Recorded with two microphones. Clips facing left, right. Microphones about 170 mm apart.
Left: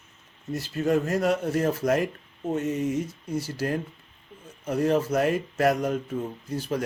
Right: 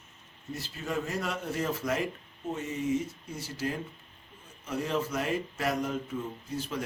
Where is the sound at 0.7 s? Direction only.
60° left (ahead or behind).